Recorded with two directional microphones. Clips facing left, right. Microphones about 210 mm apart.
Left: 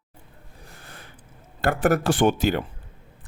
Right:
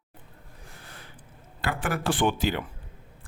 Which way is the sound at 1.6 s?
45° left (ahead or behind).